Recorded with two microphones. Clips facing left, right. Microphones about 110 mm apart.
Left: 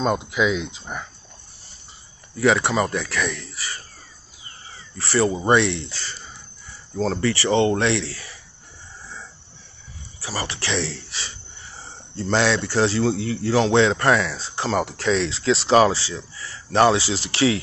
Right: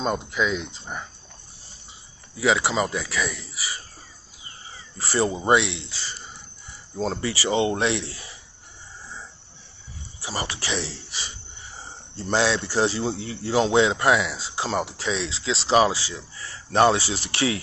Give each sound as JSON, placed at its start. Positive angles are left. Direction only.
{"t": 0.0, "sound": "speech", "side_deg": 5}
{"t": 2.4, "sound": "speech", "side_deg": -5}
{"t": 4.9, "sound": "speech", "side_deg": -20}
{"t": 10.2, "sound": "speech", "side_deg": -20}
{"t": 12.2, "sound": "speech", "side_deg": -10}
{"t": 16.1, "sound": "speech", "side_deg": -35}
{"t": 17.0, "sound": "speech", "side_deg": 30}